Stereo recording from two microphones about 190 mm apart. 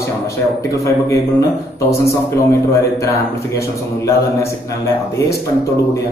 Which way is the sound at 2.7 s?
15° left (ahead or behind).